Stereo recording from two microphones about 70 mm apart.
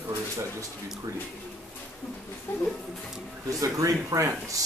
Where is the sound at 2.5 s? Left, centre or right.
Left.